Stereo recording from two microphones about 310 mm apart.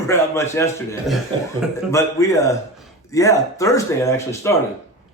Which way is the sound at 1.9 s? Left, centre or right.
Centre.